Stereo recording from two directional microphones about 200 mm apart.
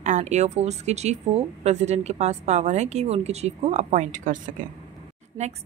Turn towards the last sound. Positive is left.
turn(degrees=-35)  # may be behind; listen again after turning